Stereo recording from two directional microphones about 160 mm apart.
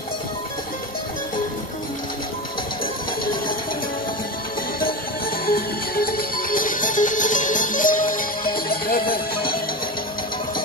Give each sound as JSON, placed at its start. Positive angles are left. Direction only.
{"t": 5.5, "sound": "music", "side_deg": 65}